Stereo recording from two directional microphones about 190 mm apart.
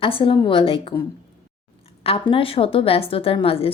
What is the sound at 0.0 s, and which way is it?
Speech, 30° left (ahead or behind).